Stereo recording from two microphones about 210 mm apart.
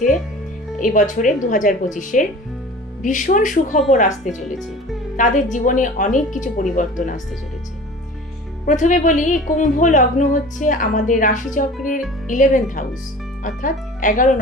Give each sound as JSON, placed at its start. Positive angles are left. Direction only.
{"t": 0.8, "sound": "a woman's voice", "side_deg": 40}
{"t": 8.6, "sound": "a woman's voice", "side_deg": 35}